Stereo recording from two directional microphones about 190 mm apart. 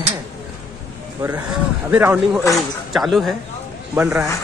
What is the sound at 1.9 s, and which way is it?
Speech, 10° right (ahead or behind).